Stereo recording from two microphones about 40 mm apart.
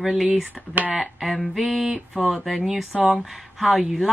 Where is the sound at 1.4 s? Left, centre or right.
Centre.